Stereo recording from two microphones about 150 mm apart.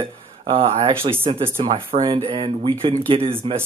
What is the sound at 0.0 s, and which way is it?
Speech, 35° right (ahead or behind).